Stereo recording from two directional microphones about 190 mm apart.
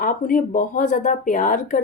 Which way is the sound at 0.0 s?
45° left (ahead or behind).